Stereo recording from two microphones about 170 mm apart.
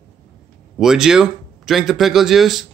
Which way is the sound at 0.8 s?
5° right (ahead or behind).